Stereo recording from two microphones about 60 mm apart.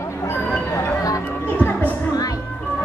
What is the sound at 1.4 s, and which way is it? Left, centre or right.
Music, left.